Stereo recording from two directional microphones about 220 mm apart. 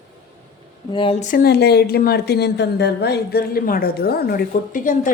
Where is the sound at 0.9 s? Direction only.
25° left (ahead or behind).